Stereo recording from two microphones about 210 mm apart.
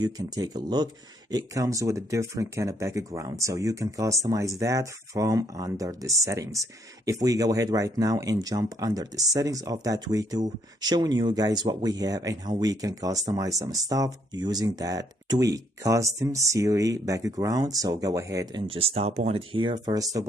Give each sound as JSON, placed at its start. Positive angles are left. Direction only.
{"t": 0.0, "sound": "speech", "side_deg": -20}